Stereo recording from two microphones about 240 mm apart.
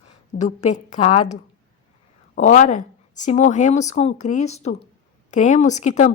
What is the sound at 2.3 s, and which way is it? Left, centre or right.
Speech, left.